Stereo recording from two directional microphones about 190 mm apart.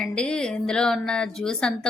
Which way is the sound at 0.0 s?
5° left (ahead or behind).